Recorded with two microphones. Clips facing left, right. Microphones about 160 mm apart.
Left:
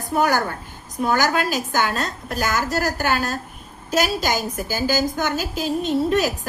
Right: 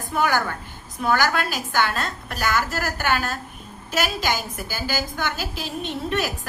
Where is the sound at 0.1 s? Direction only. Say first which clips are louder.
Left 3 dB; 40° left (ahead or behind).